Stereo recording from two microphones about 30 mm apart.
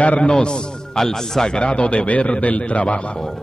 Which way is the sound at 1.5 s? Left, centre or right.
Left.